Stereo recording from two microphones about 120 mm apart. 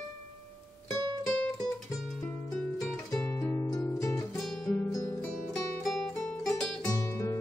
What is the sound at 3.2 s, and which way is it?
Music, 20° left (ahead or behind).